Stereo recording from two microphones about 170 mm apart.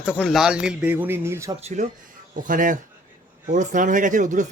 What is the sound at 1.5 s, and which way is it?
Speech, 40° right (ahead or behind).